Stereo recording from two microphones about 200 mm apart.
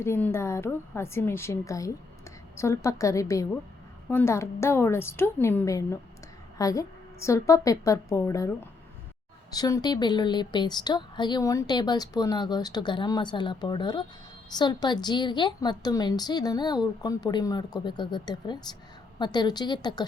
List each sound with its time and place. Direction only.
0.0 s a woman's voice: 10° left (ahead or behind)
9.6 s a woman's voice: 20° left (ahead or behind)